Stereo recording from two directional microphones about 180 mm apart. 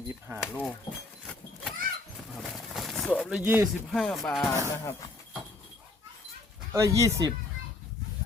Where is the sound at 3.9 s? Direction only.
5° left (ahead or behind).